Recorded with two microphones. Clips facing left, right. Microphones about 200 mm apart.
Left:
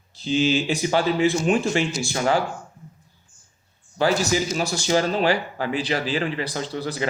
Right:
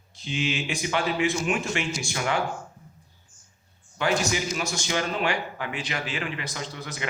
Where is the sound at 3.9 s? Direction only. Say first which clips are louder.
Left 5 dB; 35° left (ahead or behind).